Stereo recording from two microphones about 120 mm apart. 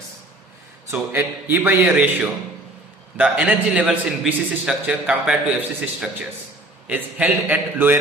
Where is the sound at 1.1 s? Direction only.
15° right (ahead or behind).